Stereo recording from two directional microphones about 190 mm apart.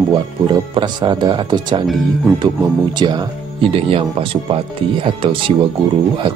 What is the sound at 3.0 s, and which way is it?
Speech, 25° right (ahead or behind).